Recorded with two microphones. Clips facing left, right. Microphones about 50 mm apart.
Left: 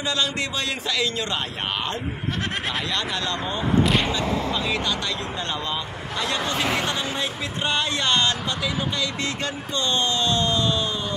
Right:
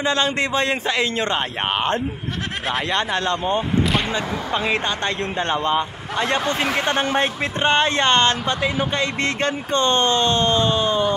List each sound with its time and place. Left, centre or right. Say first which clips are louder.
0.0 s speech: right 5 dB; right